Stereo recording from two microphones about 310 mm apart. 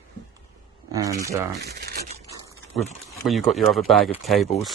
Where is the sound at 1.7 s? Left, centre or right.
Right.